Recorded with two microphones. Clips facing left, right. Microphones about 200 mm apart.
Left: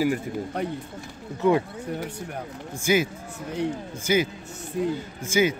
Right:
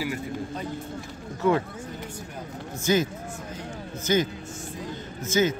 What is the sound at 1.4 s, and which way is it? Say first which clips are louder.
Speech: left 2 dB; 15° left (ahead or behind).